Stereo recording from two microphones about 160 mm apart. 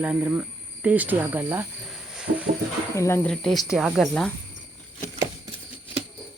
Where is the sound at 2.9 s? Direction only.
20° left (ahead or behind).